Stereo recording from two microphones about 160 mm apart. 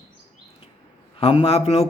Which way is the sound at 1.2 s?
35° left (ahead or behind).